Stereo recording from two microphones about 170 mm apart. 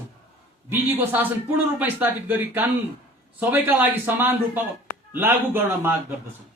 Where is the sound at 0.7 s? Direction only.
10° right (ahead or behind).